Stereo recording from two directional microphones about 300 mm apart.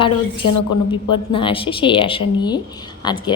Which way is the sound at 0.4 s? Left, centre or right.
Left.